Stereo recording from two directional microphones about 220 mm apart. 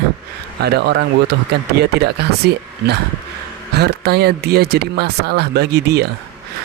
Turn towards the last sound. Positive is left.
turn(degrees=-45)  # may be behind; listen again after turning